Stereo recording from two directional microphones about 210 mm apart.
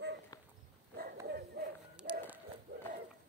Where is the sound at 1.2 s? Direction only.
50° right (ahead or behind).